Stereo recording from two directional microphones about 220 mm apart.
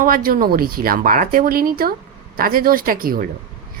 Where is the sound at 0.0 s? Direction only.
40° right (ahead or behind).